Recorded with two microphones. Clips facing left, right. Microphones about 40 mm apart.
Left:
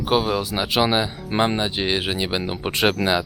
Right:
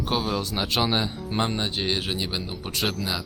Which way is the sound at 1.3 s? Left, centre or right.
Left.